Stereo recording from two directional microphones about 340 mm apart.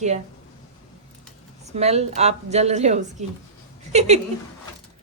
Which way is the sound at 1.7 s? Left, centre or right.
Centre.